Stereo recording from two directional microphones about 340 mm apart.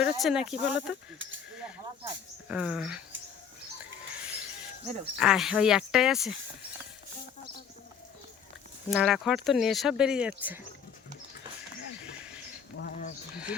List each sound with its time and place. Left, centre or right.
0.0 s speech: centre
1.2 s speech: right
2.0 s speech: centre
4.2 s a sound: centre
5.1 s speech: centre
8.9 s speech: centre
11.9 s a sound: centre
12.8 s a sound: left
13.3 s speech: centre